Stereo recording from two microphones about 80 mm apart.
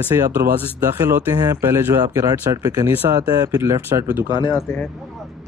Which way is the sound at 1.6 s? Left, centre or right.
Right.